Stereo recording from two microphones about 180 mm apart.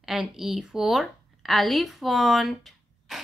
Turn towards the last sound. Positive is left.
turn(degrees=0)  # may be behind; listen again after turning